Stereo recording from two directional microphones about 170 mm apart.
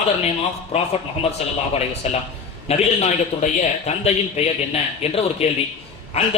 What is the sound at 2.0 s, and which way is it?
A man's voice, 40° left (ahead or behind).